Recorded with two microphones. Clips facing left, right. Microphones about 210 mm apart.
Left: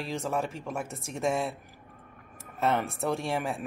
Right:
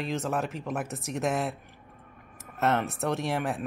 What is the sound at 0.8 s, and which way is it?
Speech, 30° left (ahead or behind).